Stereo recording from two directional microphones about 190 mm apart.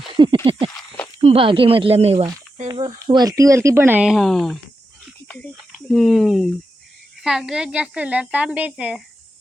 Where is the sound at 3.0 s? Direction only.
20° right (ahead or behind).